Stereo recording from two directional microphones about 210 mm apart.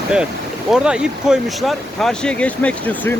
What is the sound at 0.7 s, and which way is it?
Speech, 5° right (ahead or behind).